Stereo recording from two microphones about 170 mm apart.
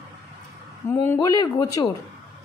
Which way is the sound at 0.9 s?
15° left (ahead or behind).